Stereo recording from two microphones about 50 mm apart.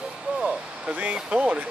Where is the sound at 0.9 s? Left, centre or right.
Right.